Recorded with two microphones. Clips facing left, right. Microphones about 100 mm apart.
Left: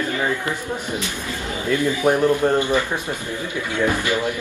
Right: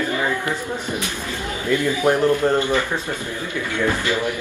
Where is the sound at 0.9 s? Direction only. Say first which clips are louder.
Even; 15° right (ahead or behind).